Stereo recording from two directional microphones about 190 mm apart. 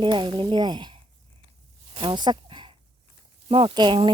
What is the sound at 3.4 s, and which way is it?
Speech, 30° right (ahead or behind).